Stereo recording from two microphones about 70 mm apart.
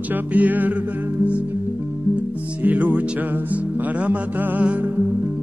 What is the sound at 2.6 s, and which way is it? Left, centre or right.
Music, right.